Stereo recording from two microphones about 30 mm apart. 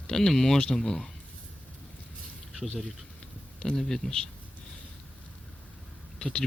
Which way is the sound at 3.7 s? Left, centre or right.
Centre.